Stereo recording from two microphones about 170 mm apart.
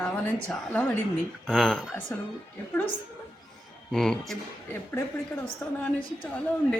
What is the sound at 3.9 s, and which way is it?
Speech, 5° left (ahead or behind).